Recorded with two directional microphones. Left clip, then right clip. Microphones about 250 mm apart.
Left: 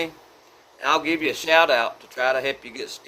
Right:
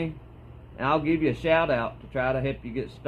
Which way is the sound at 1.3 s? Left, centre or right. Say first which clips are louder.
Left 7 dB; centre.